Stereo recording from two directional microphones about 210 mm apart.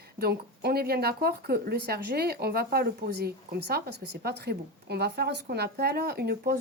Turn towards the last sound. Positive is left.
turn(degrees=-45)  # may be behind; listen again after turning